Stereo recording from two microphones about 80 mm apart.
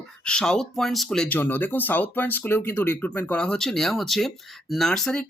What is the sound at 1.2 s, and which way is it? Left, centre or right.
Speech, left.